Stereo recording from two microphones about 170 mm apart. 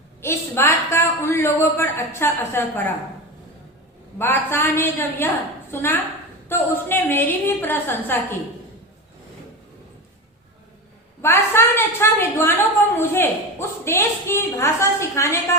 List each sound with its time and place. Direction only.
0.2 s a man's voice: 15° left (ahead or behind)
4.2 s a man's voice: 15° left (ahead or behind)
11.2 s a man's voice: 15° left (ahead or behind)